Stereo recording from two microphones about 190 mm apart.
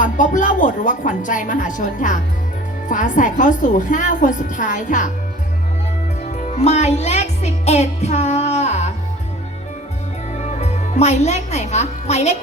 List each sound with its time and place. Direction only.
0.0 s a woman's voice: 40° left (ahead or behind)
6.7 s a woman's voice: 35° left (ahead or behind)
10.4 s speech: 35° left (ahead or behind)